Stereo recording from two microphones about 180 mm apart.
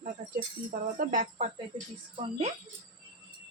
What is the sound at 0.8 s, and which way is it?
Speech, 45° right (ahead or behind).